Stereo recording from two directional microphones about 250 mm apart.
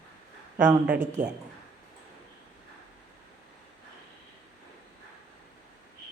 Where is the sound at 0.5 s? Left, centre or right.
Centre.